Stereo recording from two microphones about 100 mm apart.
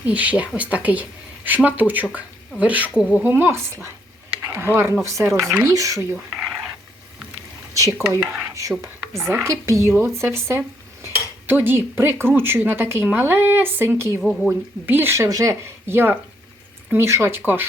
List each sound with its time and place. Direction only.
0.0 s speech: 15° right (ahead or behind)
3.2 s speech: 20° right (ahead or behind)
6.1 s speech: 5° right (ahead or behind)
7.8 s speech: 30° right (ahead or behind)
14.2 s speech: centre (ahead or behind)
14.8 s speech: 20° right (ahead or behind)